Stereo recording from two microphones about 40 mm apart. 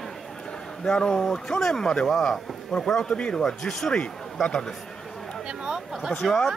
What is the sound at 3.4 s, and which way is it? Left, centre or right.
A man's voice, centre.